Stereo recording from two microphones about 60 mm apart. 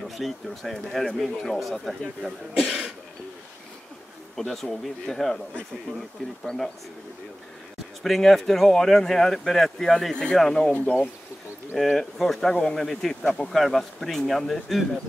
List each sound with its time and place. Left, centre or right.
0.1 s speech: centre
4.4 s speech: centre
8.0 s speech: centre
10.7 s speech: left
11.7 s speech: centre